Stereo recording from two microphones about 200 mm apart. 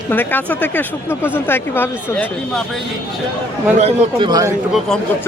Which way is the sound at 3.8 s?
25° right (ahead or behind).